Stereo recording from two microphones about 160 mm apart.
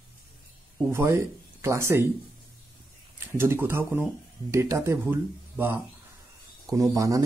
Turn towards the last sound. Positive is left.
turn(degrees=-20)  # may be behind; listen again after turning